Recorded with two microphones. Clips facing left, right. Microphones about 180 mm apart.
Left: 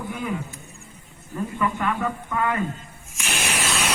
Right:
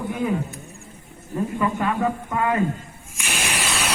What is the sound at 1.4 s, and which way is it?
A man's voice, 30° right (ahead or behind).